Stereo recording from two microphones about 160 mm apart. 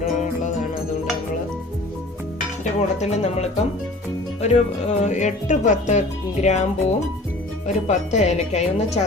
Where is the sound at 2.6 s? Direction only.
45° left (ahead or behind).